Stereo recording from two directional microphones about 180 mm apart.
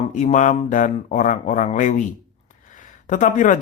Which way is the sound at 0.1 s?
45° left (ahead or behind).